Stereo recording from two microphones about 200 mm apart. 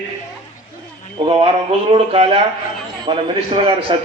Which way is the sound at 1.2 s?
30° right (ahead or behind).